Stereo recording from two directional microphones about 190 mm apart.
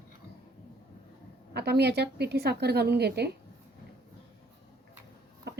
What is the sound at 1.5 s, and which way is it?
A woman's voice, 60° right (ahead or behind).